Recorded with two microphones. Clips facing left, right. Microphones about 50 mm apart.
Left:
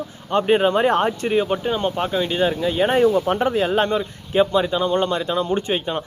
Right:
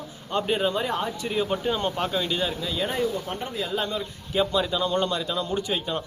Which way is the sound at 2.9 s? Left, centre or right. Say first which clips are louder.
Left 10 dB; left.